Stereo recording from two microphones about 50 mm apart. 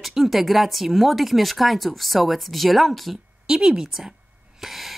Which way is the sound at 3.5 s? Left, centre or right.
Centre.